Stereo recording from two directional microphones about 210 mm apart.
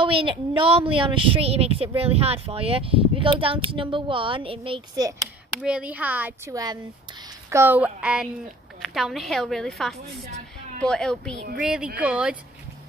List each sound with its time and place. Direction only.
0.0 s a woman's voice: 25° right (ahead or behind)
5.6 s a woman's voice: 5° right (ahead or behind)